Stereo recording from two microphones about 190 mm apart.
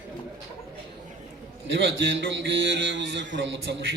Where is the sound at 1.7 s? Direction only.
75° right (ahead or behind).